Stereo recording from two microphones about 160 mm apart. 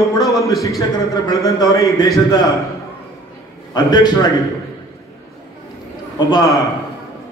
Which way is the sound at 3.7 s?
25° left (ahead or behind).